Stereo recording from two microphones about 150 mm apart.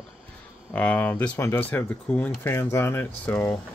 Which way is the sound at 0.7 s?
10° left (ahead or behind).